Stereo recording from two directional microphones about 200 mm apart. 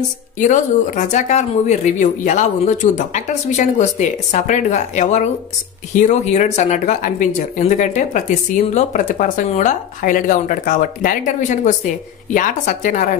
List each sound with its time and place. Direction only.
0.4 s speech: 40° left (ahead or behind)